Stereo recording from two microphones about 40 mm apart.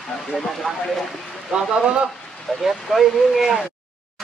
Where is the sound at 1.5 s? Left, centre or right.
Centre.